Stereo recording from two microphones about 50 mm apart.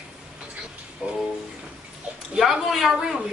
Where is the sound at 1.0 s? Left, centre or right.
Centre.